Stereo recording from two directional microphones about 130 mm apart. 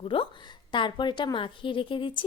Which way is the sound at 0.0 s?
45° left (ahead or behind).